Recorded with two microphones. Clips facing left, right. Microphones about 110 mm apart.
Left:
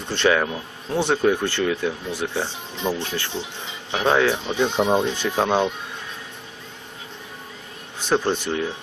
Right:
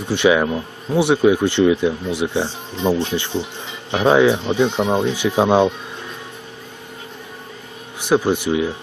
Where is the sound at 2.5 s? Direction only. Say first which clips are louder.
Right 5 dB; 40° right (ahead or behind).